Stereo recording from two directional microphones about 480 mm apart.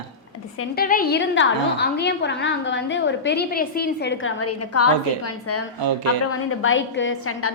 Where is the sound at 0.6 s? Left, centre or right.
Centre.